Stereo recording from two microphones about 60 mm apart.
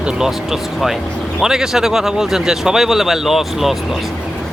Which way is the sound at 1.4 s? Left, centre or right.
Centre.